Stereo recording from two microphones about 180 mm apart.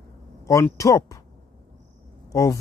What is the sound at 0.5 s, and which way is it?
Speech, 15° left (ahead or behind).